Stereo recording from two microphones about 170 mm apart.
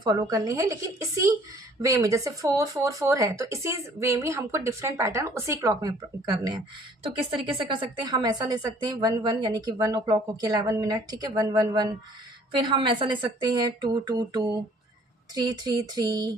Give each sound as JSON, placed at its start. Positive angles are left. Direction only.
{"t": 0.0, "sound": "a woman's voice", "side_deg": -20}
{"t": 7.6, "sound": "a woman's voice", "side_deg": -30}